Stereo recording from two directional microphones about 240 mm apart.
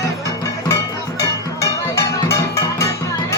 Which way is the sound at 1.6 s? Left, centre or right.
Centre.